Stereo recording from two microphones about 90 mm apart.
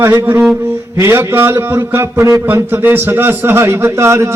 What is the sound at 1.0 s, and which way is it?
Speech, 30° right (ahead or behind).